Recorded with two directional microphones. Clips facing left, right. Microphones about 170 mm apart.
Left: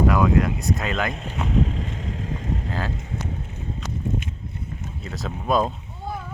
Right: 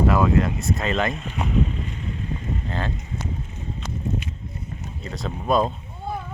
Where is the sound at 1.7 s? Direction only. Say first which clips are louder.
Left 1 dB; 90° left.